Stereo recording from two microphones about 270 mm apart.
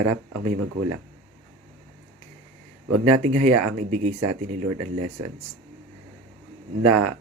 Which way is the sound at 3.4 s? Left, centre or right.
Right.